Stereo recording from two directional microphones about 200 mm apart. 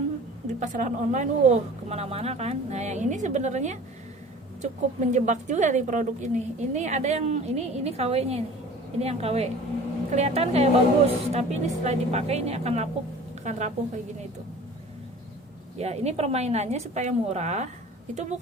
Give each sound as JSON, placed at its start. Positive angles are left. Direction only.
{"t": 0.4, "sound": "a woman's voice", "side_deg": -40}
{"t": 15.8, "sound": "a woman's voice", "side_deg": -35}